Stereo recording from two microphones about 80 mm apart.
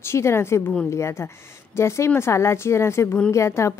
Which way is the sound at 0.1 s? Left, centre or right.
Left.